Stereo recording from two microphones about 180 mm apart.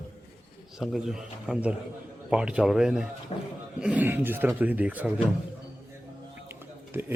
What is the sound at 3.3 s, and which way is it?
Speech, 30° left (ahead or behind).